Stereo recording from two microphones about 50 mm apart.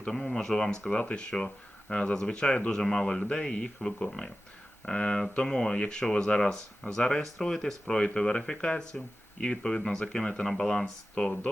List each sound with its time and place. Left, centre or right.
0.1 s speech: centre
0.9 s speech: left